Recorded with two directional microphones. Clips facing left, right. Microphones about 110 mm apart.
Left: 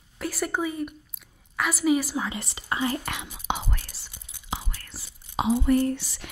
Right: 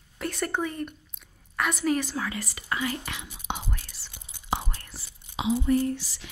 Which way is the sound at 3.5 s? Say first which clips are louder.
Left 4 dB; 90° left.